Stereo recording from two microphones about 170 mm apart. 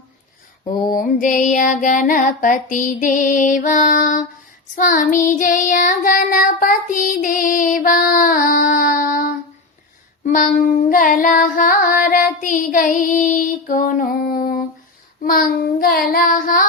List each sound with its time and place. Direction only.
0.7 s child singing: 55° left (ahead or behind)